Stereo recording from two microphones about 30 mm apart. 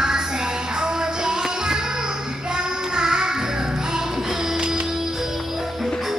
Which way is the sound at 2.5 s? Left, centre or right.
Right.